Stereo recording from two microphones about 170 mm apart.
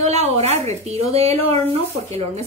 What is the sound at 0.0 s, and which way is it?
A woman's voice, 40° right (ahead or behind).